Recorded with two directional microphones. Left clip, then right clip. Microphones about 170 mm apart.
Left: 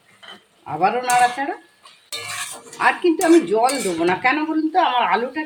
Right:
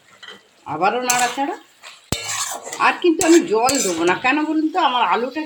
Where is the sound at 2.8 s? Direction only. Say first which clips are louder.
Right 1 dB; 10° right (ahead or behind).